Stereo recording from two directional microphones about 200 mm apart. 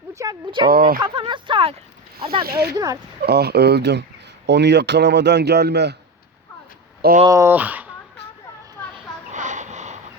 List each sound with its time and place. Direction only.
0.1 s speech: 15° right (ahead or behind)
0.7 s speech: 50° right (ahead or behind)
0.9 s a sound: 25° right (ahead or behind)
2.4 s speech: 50° right (ahead or behind)
2.7 s speech: 20° right (ahead or behind)
3.2 s a man's voice: 55° right (ahead or behind)
7.3 s speech: 15° right (ahead or behind)
9.3 s a sound: 35° right (ahead or behind)